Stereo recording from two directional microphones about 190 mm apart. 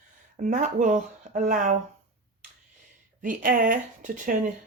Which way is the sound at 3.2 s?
45° right (ahead or behind).